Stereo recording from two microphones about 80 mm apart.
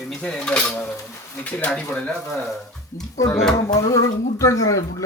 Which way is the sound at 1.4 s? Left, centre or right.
Centre.